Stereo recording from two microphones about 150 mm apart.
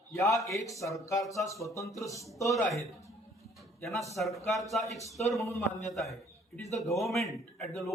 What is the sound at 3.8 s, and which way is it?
A man's voice, centre (ahead or behind).